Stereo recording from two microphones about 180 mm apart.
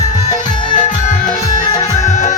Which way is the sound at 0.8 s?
45° left (ahead or behind).